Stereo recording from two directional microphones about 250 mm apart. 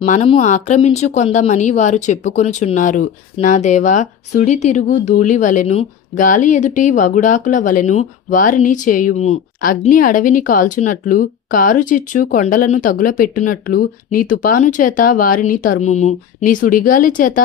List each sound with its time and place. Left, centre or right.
0.0 s a woman's voice: left